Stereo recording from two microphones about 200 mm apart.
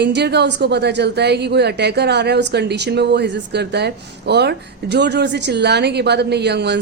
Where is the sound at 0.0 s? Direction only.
55° right (ahead or behind).